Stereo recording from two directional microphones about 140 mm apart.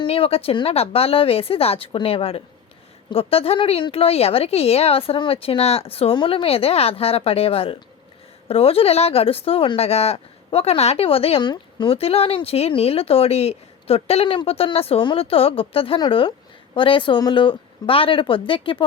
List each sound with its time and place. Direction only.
0.0 s speech: 45° left (ahead or behind)